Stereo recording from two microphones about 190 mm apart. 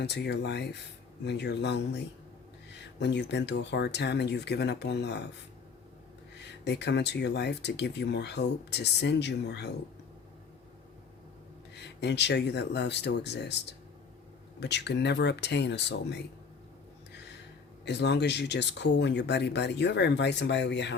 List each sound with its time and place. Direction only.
0.0 s speech: 65° left (ahead or behind)
3.0 s speech: 65° left (ahead or behind)
6.5 s speech: 65° left (ahead or behind)
11.7 s speech: 65° left (ahead or behind)
17.8 s speech: 65° left (ahead or behind)